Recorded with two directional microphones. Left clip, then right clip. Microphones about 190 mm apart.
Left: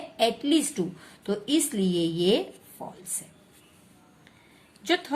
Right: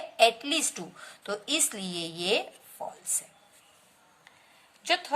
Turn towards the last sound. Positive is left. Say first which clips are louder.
# left 1 dB
turn(degrees=-15)  # may be behind; listen again after turning